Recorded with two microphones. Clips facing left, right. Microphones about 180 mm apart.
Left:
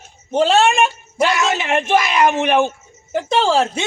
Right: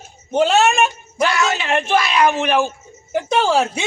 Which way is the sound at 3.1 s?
5° right (ahead or behind).